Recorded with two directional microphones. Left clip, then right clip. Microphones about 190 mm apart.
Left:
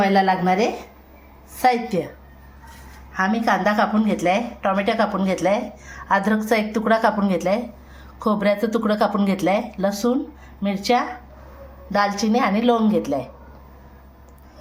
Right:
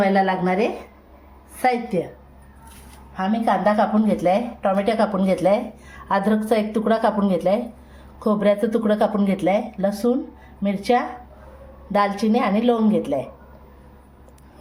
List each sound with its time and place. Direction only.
0.0 s a woman's voice: 5° right (ahead or behind)
3.2 s a woman's voice: 15° right (ahead or behind)